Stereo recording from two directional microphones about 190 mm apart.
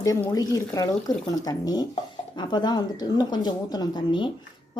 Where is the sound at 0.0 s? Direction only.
15° left (ahead or behind).